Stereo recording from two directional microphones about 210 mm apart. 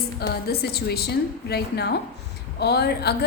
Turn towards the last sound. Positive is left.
turn(degrees=50)  # may be behind; listen again after turning